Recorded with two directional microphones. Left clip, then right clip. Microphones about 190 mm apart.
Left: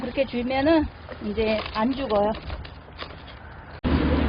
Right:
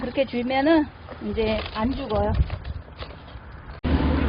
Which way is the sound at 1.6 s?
5° right (ahead or behind).